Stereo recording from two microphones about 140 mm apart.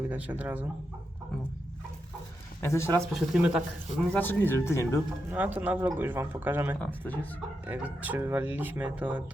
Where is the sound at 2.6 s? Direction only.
20° left (ahead or behind).